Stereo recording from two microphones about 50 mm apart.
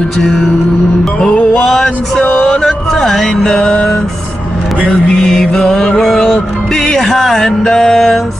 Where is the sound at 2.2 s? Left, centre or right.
Left.